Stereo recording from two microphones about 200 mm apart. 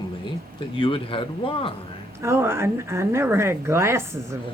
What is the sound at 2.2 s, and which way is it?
Speech, 15° right (ahead or behind).